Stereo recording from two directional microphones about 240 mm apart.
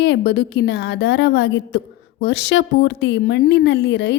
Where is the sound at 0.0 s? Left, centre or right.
Left.